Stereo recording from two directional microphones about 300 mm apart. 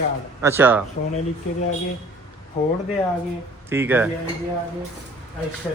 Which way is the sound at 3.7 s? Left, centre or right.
Centre.